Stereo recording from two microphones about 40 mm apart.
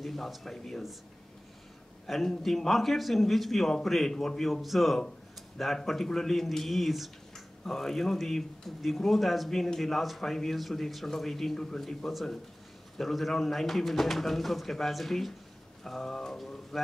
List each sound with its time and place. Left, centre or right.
0.0 s a man's voice: centre
2.0 s a man's voice: centre
7.3 s a man's voice: centre
11.5 s a man's voice: centre